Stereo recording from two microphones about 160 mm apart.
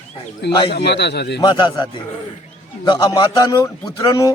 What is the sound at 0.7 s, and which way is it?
Speech, 90° left.